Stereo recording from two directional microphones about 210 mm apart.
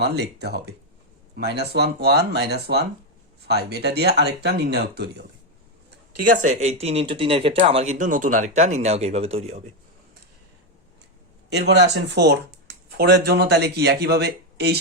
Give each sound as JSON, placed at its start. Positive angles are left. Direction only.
{"t": 0.0, "sound": "a man's voice", "side_deg": -50}
{"t": 6.4, "sound": "speech", "side_deg": -35}
{"t": 11.4, "sound": "a man's voice", "side_deg": -55}